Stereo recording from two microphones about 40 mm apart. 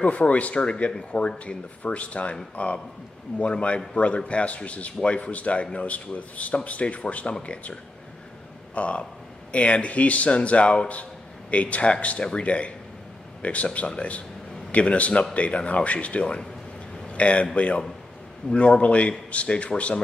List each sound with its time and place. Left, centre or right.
0.0 s a man's voice: left
8.7 s a man's voice: left